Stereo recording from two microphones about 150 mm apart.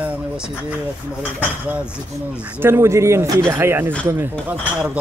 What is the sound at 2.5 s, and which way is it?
Speech, 15° right (ahead or behind).